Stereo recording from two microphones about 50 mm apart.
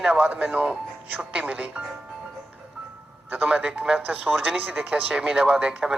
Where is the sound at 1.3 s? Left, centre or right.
Centre.